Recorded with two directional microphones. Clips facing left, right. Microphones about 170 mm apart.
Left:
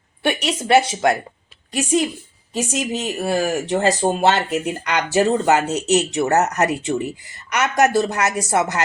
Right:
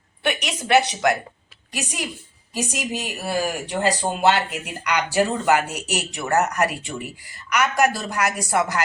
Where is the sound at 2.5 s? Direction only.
25° left (ahead or behind).